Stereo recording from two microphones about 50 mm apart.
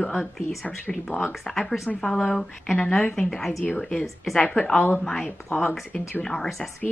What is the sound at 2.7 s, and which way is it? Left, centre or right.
A woman's voice, centre.